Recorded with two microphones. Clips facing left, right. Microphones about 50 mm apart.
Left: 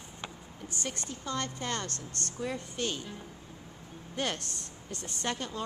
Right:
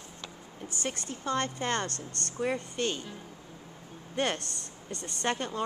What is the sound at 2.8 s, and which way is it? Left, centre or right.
Speech, centre.